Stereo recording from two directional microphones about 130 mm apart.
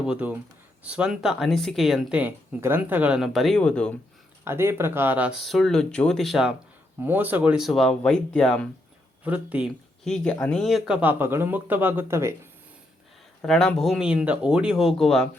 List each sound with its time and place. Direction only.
0.0 s speech: 10° right (ahead or behind)
2.1 s speech: 15° right (ahead or behind); by 3.9 s 5° left (ahead or behind)
4.4 s speech: 20° right (ahead or behind)
5.5 s speech: centre (ahead or behind)
7.0 s speech: 15° right (ahead or behind); by 8.6 s 5° left (ahead or behind)
9.2 s speech: 10° right (ahead or behind)
10.0 s speech: 5° left (ahead or behind); by 12.3 s 20° right (ahead or behind)
13.4 s speech: 5° left (ahead or behind)